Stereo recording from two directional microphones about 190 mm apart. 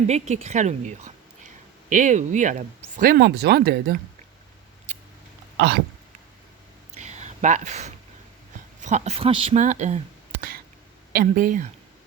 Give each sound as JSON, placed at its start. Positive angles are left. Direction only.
{"t": 0.1, "sound": "speech", "side_deg": -35}
{"t": 3.2, "sound": "speech", "side_deg": -60}
{"t": 5.5, "sound": "speech", "side_deg": -60}
{"t": 6.9, "sound": "a sound", "side_deg": -35}
{"t": 8.8, "sound": "speech", "side_deg": -40}
{"t": 11.1, "sound": "speech", "side_deg": -50}